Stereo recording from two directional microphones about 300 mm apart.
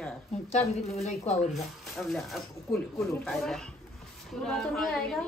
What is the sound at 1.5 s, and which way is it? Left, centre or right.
Speech, centre.